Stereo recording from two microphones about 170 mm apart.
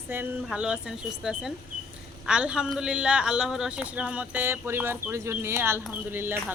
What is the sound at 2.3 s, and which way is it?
Speech, 5° right (ahead or behind).